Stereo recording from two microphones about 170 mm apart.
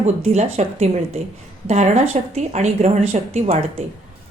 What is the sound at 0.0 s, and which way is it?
A woman's voice, 40° right (ahead or behind).